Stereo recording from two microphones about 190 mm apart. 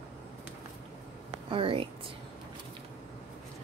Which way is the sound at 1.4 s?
25° right (ahead or behind).